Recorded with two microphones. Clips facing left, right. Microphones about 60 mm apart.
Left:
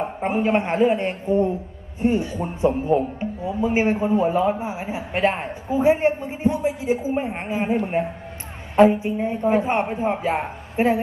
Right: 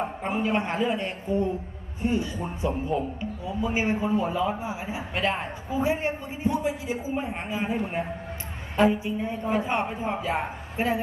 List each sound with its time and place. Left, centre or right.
0.2 s a man's voice: left